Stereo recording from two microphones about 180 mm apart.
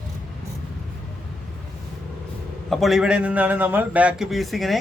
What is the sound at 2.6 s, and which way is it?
A man's voice, centre (ahead or behind).